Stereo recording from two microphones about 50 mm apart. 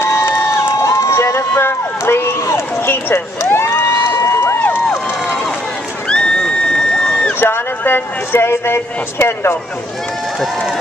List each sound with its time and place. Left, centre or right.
0.0 s crowd: left
1.5 s speech: left
2.9 s speech: left
3.9 s a sound: left
4.6 s cheering: left
6.0 s crowd: centre
7.3 s speech: left